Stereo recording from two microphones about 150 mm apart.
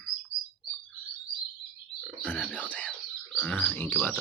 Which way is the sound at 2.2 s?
10° left (ahead or behind).